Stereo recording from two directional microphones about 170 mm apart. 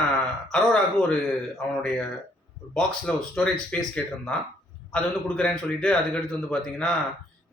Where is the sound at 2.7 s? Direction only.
5° left (ahead or behind).